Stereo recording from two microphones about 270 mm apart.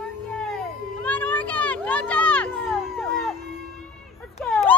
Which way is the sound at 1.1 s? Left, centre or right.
Centre.